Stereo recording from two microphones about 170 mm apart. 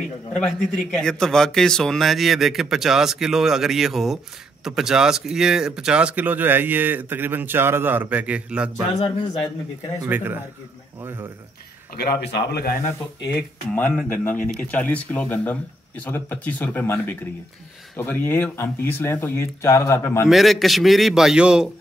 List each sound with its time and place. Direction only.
0.3 s a man's voice: 5° left (ahead or behind)
8.9 s a man's voice: 25° left (ahead or behind)
10.0 s speech: 10° right (ahead or behind)
12.0 s a man's voice: 75° left (ahead or behind)
14.0 s speech: 10° left (ahead or behind)
20.2 s a man's voice: centre (ahead or behind)